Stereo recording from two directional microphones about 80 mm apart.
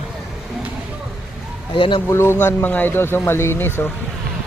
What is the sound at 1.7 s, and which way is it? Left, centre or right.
Speech, left.